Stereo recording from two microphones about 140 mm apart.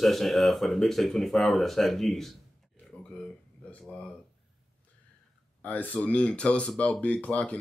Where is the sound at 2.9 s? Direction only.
5° left (ahead or behind).